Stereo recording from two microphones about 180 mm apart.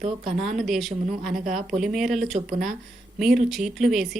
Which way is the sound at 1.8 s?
Centre (ahead or behind).